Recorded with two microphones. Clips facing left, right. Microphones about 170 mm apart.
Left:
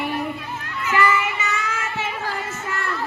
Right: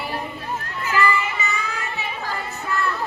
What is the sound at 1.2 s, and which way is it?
Child singing, 85° left.